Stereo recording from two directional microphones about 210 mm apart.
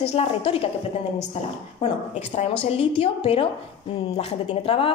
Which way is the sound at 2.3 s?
30° left (ahead or behind).